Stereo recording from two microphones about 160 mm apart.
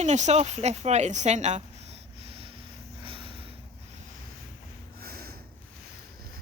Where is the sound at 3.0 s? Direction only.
35° right (ahead or behind).